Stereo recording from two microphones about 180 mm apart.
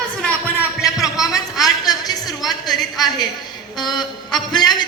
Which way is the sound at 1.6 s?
20° left (ahead or behind).